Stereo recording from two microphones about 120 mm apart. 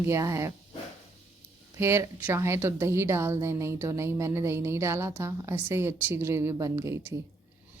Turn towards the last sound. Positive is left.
turn(degrees=-25)  # may be behind; listen again after turning